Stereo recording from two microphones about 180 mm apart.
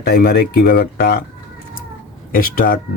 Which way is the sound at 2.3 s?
50° left (ahead or behind).